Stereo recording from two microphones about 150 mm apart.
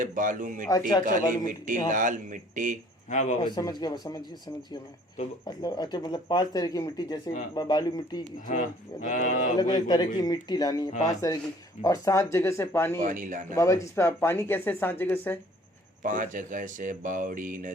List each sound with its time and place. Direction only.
0.0 s a man's voice: 60° right (ahead or behind)
3.1 s a man's voice: 50° left (ahead or behind)
3.4 s speech: 30° left (ahead or behind)
5.5 s speech: 25° left (ahead or behind)
8.4 s speech: 55° left (ahead or behind)
9.6 s speech: 25° left (ahead or behind)
13.0 s a man's voice: 65° right (ahead or behind)
13.5 s speech: 20° left (ahead or behind)
16.0 s a man's voice: 60° right (ahead or behind)